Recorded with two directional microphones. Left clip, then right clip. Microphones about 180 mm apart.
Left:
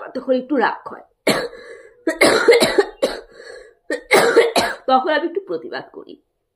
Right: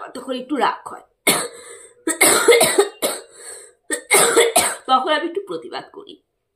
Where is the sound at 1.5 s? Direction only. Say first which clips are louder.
Left 3 dB; 15° right (ahead or behind).